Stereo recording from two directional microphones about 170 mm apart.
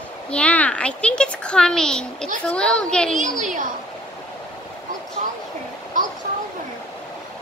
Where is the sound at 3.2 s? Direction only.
50° right (ahead or behind).